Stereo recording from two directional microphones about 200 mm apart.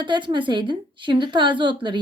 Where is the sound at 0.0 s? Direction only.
25° right (ahead or behind).